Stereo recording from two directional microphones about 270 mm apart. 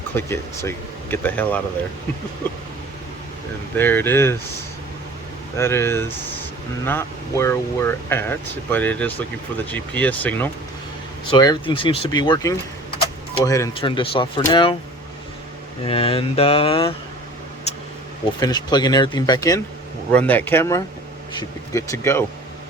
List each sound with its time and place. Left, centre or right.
0.2 s speech: centre
3.8 s speech: centre
5.5 s speech: centre
15.9 s mantra: left
18.3 s speech: centre